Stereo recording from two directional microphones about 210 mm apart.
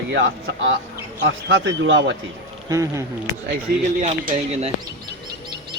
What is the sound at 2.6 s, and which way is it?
Speech, 15° right (ahead or behind).